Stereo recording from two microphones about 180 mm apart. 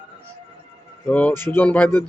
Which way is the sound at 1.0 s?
5° left (ahead or behind).